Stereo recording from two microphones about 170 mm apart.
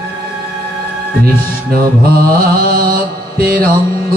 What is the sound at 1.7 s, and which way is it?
Mantra, 60° right (ahead or behind).